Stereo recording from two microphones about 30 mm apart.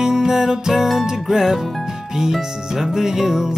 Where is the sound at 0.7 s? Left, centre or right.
Centre.